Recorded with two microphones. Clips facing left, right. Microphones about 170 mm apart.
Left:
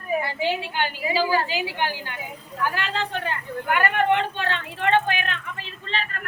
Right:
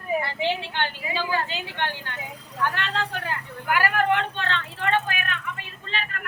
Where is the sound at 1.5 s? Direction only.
10° left (ahead or behind).